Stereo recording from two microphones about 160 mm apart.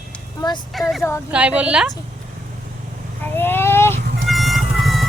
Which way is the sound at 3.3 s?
15° left (ahead or behind).